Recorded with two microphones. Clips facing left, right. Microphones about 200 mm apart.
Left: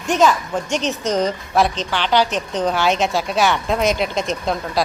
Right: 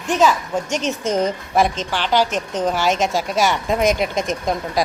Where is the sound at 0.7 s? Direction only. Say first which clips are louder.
Left 2 dB; 45° right (ahead or behind).